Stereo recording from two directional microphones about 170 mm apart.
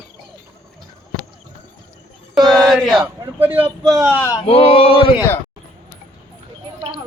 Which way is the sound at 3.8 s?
20° right (ahead or behind).